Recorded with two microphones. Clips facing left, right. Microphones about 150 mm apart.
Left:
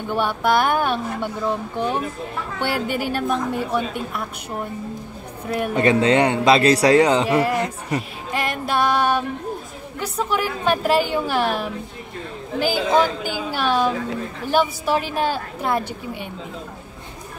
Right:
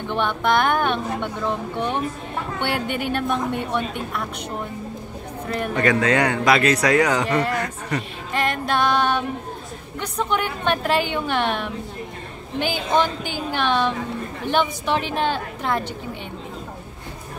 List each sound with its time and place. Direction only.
0.1 s a woman's voice: 5° left (ahead or behind)
2.6 s a woman's voice: 5° left (ahead or behind)
5.8 s a man's voice: 25° left (ahead or behind)
7.2 s a woman's voice: 10° left (ahead or behind)
7.5 s a man's voice: 20° left (ahead or behind)
8.3 s music: 10° left (ahead or behind)
9.9 s a woman's voice: 5° left (ahead or behind)